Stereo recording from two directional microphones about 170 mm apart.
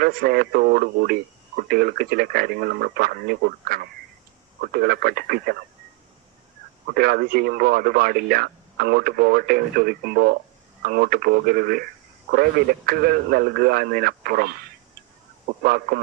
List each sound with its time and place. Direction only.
0.0 s speech: 65° right (ahead or behind)
6.9 s speech: 65° right (ahead or behind)
15.6 s speech: 60° right (ahead or behind)